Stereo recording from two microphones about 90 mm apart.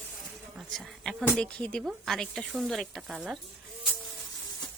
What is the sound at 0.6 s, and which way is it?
Insect, centre (ahead or behind).